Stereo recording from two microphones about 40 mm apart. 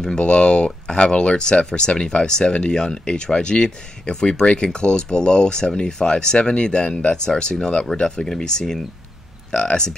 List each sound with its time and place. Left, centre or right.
0.2 s speech: left